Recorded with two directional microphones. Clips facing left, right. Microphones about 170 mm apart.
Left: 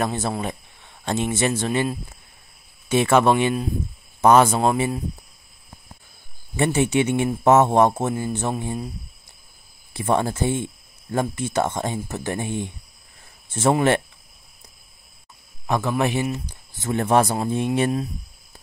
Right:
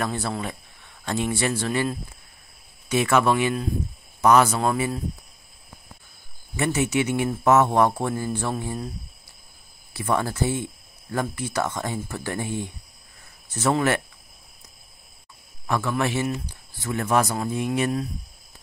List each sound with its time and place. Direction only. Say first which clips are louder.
0.0 s speech: left 3 dB; 20° left (ahead or behind)
6.5 s speech: left 3 dB; 30° left (ahead or behind)
9.9 s speech: left 3 dB; 25° left (ahead or behind)
15.6 s speech: left 3 dB; 20° left (ahead or behind)